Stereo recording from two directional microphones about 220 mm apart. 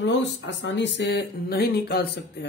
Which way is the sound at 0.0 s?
55° left (ahead or behind).